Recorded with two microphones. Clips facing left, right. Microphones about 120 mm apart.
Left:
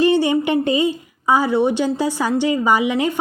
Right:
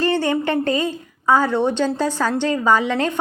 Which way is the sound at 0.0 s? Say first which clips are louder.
Left 4 dB; 15° left (ahead or behind).